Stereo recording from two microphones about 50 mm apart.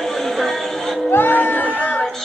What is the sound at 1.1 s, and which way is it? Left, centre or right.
Crowd, left.